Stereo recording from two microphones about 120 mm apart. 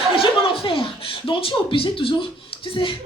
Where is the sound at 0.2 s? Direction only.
50° left (ahead or behind).